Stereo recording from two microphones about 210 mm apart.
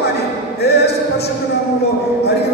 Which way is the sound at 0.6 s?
50° left (ahead or behind).